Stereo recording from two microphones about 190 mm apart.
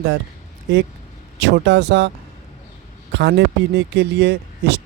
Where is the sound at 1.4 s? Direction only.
65° right (ahead or behind).